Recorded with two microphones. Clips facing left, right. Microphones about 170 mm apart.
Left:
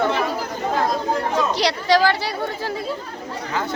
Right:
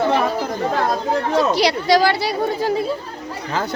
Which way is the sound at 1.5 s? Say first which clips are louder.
Right 2 dB; 10° right (ahead or behind).